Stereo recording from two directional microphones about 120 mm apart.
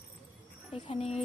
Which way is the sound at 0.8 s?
60° left (ahead or behind).